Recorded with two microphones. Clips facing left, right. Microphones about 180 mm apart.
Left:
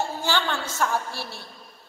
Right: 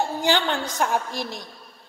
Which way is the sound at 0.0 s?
15° right (ahead or behind).